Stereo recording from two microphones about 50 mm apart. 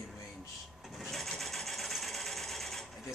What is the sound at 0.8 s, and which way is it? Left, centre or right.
Sewing machine, centre.